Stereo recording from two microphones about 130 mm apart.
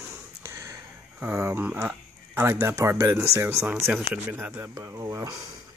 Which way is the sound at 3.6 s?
5° right (ahead or behind).